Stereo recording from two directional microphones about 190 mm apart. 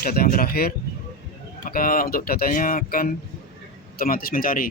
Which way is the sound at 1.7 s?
50° left (ahead or behind).